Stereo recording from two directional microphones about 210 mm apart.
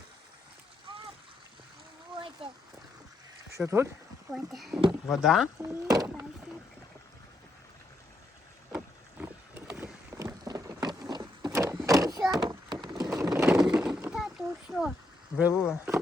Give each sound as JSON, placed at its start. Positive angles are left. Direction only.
{"t": 2.4, "sound": "a sound", "side_deg": -25}
{"t": 3.6, "sound": "speech", "side_deg": -15}
{"t": 4.3, "sound": "speech", "side_deg": 0}
{"t": 5.6, "sound": "speech", "side_deg": -15}
{"t": 8.7, "sound": "boat", "side_deg": -10}
{"t": 10.2, "sound": "a sound", "side_deg": -15}
{"t": 15.4, "sound": "speech", "side_deg": -5}